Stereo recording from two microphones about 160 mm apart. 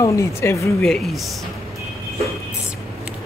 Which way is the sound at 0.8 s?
5° left (ahead or behind).